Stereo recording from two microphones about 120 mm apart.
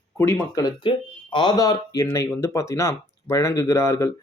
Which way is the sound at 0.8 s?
45° left (ahead or behind).